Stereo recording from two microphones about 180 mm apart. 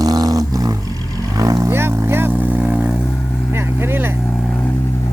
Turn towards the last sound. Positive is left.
turn(degrees=-10)  # may be behind; listen again after turning